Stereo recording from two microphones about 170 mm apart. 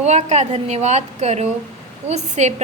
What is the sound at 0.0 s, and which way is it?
A woman's voice, 40° right (ahead or behind).